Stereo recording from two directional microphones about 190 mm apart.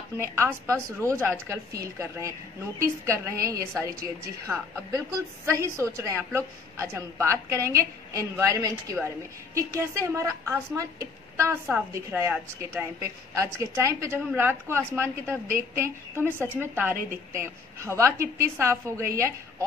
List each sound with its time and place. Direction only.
0.2 s a woman's voice: 15° right (ahead or behind)